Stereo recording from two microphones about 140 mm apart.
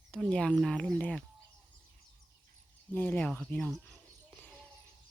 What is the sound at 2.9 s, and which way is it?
Speech, 15° left (ahead or behind).